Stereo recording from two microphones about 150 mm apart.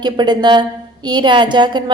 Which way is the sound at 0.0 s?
30° right (ahead or behind).